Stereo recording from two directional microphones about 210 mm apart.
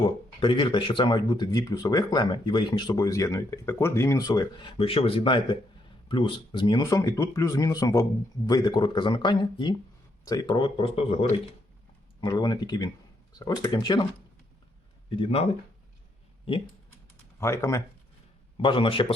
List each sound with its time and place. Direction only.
0.3 s speech: 25° left (ahead or behind)
15.1 s speech: 25° left (ahead or behind)
16.5 s speech: 25° left (ahead or behind)
17.4 s speech: 15° left (ahead or behind)
18.5 s speech: 25° left (ahead or behind)